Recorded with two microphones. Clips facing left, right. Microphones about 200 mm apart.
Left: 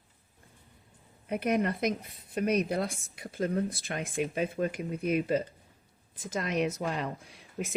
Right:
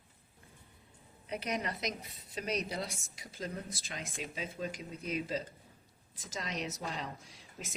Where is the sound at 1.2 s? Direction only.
55° left (ahead or behind).